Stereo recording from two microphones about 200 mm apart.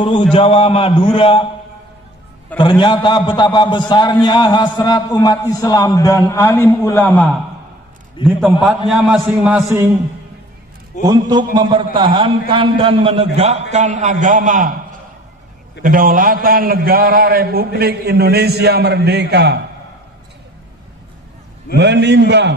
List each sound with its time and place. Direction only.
0.0 s a man's voice: 25° left (ahead or behind)
2.5 s a man's voice: 25° left (ahead or behind); by 9.6 s centre (ahead or behind)
11.1 s a man's voice: 20° right (ahead or behind); by 14.7 s 40° right (ahead or behind)
15.8 s a man's voice: 45° right (ahead or behind)
21.7 s a man's voice: 60° right (ahead or behind)